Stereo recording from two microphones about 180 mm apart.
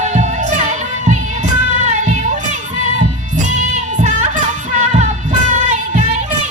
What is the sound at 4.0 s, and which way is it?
Music, 40° right (ahead or behind).